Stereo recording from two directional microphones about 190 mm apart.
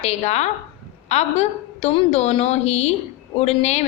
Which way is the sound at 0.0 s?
35° left (ahead or behind).